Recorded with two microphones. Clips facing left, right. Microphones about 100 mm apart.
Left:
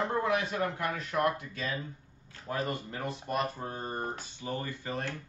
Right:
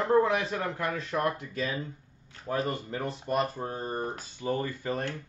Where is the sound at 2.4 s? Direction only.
30° right (ahead or behind).